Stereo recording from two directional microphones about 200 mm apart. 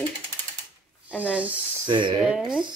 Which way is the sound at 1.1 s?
5° right (ahead or behind).